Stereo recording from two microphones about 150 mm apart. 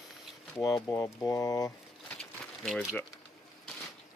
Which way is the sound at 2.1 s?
Centre (ahead or behind).